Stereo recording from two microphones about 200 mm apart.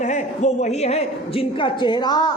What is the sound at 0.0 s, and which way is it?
A woman's voice, 35° left (ahead or behind).